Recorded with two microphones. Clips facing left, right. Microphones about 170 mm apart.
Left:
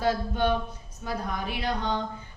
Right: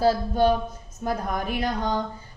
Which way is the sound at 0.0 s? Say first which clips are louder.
Right 5 dB; 40° right (ahead or behind).